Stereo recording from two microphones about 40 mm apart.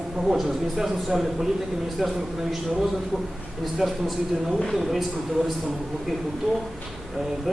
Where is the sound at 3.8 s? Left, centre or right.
Centre.